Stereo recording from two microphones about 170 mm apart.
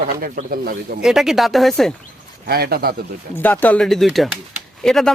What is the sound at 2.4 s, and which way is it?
Speech, 65° right (ahead or behind).